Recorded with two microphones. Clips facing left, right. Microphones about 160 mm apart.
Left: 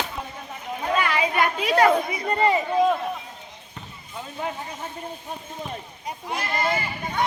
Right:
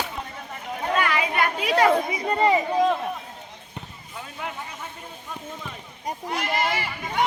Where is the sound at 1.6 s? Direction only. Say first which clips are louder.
Left 1 dB; 10° right (ahead or behind).